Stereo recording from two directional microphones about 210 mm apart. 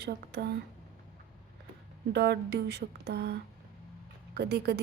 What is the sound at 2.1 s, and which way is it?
A woman's voice, 50° right (ahead or behind).